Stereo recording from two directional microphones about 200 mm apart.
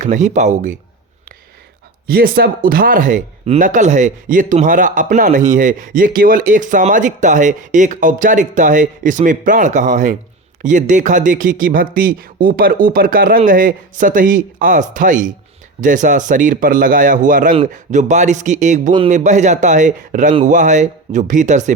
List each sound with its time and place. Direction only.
0.0 s speech: 35° right (ahead or behind)
2.0 s speech: 50° right (ahead or behind)